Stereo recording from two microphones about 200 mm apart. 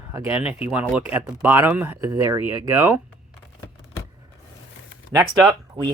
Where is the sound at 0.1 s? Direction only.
15° right (ahead or behind).